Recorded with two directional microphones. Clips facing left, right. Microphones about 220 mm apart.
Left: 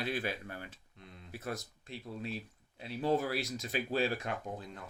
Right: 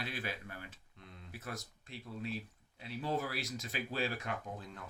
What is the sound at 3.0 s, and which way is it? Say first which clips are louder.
Speech: left 6 dB; 30° left (ahead or behind).